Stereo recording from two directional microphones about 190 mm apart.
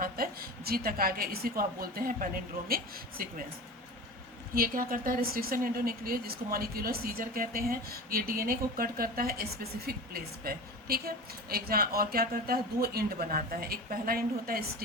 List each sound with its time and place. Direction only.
0.0 s speech: 50° right (ahead or behind)
4.5 s speech: 50° right (ahead or behind)